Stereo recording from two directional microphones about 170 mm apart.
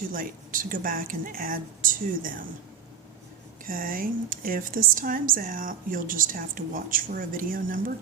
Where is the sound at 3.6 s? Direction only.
55° right (ahead or behind).